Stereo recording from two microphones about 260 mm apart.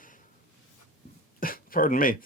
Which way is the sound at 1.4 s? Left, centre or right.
Left.